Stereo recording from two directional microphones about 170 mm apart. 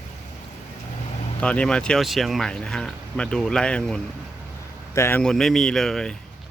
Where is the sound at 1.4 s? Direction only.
5° left (ahead or behind).